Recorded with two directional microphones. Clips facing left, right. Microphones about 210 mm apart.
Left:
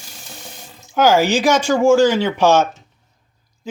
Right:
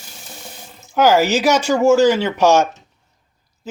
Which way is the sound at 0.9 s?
5° right (ahead or behind).